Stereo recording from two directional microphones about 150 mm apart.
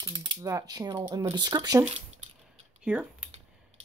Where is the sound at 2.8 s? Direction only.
5° right (ahead or behind).